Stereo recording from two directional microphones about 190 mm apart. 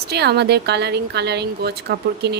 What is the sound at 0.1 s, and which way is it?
Speech, 60° right (ahead or behind).